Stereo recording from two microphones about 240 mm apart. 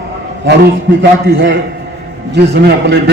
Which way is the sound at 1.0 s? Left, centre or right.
Right.